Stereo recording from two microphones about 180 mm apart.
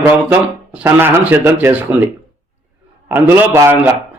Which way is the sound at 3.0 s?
10° right (ahead or behind).